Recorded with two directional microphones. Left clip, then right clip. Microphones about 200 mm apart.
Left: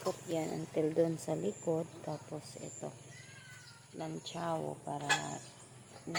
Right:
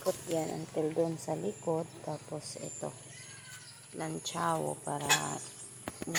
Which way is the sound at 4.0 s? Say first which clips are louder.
Right 6 dB; 25° right (ahead or behind).